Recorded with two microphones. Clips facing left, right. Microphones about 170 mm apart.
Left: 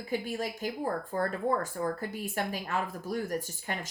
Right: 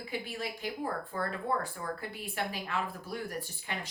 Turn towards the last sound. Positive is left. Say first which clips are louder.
# left 2 dB
turn(degrees=45)  # may be behind; listen again after turning